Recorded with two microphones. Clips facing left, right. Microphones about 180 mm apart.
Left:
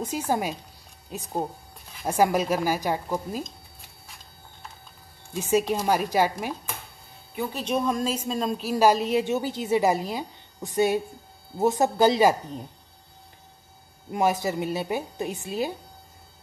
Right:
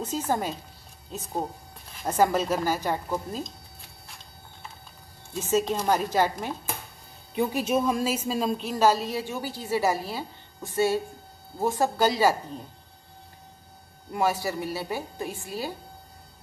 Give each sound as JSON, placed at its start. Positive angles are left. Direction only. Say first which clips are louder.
{"t": 0.0, "sound": "a woman's voice", "louder": "left 1 dB", "side_deg": 10}
{"t": 5.3, "sound": "a woman's voice", "louder": "left 2 dB", "side_deg": 10}
{"t": 7.5, "sound": "a woman's voice", "louder": "left 1 dB", "side_deg": -5}
{"t": 14.1, "sound": "speech", "louder": "left 2 dB", "side_deg": 20}